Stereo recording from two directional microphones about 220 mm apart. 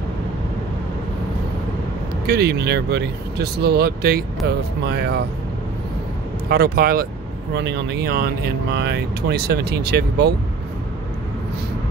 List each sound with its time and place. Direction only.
2.2 s speech: 45° right (ahead or behind)
6.5 s speech: 45° right (ahead or behind)